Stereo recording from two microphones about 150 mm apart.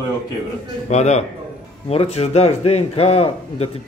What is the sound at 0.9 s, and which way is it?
A man's voice, 50° left (ahead or behind).